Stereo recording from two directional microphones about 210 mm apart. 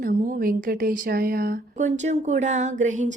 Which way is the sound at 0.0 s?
40° right (ahead or behind).